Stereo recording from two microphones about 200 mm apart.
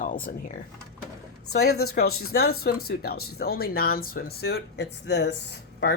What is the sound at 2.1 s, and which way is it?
Speech, 90° left.